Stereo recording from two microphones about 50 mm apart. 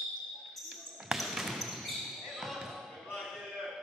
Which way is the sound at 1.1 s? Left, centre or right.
Centre.